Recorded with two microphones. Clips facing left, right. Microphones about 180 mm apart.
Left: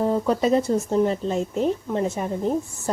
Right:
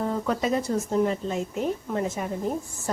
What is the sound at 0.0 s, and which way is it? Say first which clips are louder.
Speech: left 5 dB; 30° left (ahead or behind).